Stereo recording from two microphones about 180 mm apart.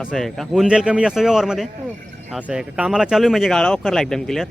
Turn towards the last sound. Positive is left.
turn(degrees=5)  # may be behind; listen again after turning